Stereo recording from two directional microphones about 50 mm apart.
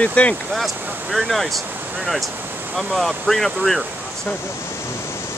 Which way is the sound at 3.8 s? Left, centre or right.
Right.